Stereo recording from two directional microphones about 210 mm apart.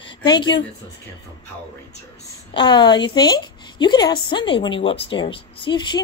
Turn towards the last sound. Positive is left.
turn(degrees=20)  # may be behind; listen again after turning